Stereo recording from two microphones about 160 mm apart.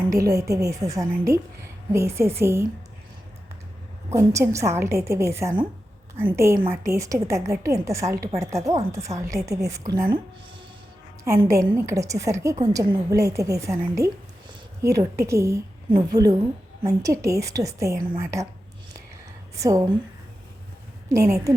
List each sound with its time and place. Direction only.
0.1 s a woman's voice: 20° right (ahead or behind)
4.1 s a woman's voice: 20° right (ahead or behind)
11.2 s a woman's voice: 20° right (ahead or behind)
19.5 s a woman's voice: 20° right (ahead or behind)
21.1 s a woman's voice: 20° right (ahead or behind)